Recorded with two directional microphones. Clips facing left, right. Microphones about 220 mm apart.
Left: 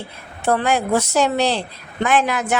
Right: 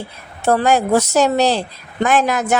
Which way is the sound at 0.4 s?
40° right (ahead or behind).